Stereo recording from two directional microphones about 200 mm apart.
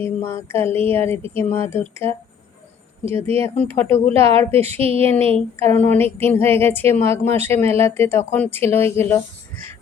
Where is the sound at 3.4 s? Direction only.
10° left (ahead or behind).